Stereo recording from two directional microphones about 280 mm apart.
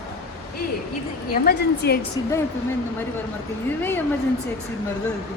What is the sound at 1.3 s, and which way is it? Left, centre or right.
Speech, left.